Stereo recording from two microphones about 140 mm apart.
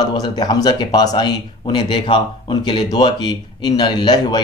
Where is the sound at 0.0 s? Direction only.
30° left (ahead or behind).